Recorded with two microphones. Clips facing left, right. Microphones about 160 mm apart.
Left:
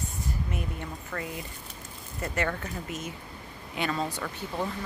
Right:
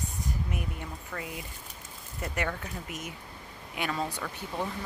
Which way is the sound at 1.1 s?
5° right (ahead or behind).